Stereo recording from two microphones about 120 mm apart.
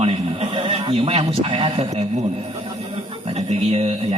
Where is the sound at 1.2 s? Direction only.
45° right (ahead or behind).